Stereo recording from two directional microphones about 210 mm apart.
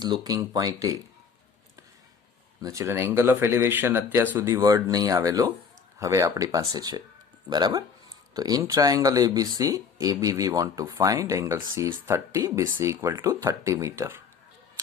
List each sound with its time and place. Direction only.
0.0 s speech: 20° right (ahead or behind)
2.6 s speech: 15° right (ahead or behind)